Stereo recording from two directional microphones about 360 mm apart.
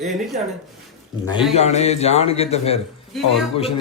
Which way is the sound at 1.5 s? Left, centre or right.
Centre.